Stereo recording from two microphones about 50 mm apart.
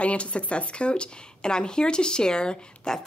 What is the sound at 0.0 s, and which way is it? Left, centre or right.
Speech, left.